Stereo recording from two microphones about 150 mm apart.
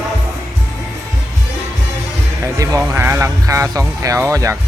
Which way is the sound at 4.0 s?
20° right (ahead or behind).